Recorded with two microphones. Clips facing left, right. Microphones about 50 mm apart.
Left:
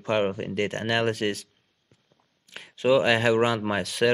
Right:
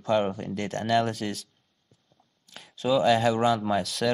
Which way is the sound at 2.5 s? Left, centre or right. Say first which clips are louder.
Left 4 dB; left.